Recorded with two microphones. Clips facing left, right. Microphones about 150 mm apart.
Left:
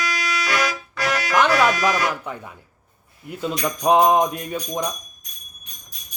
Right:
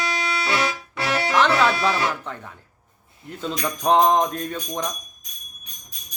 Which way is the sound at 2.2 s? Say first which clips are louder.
Left 2 dB; 10° left (ahead or behind).